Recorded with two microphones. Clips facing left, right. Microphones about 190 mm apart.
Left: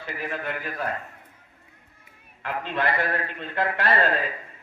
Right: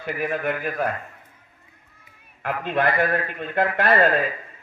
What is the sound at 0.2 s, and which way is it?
Speech, 50° right (ahead or behind).